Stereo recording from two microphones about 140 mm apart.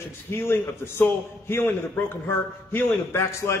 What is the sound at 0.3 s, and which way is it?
A man's voice, 15° left (ahead or behind).